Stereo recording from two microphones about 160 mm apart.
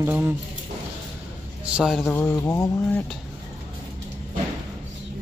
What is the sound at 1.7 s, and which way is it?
Speech, 5° right (ahead or behind).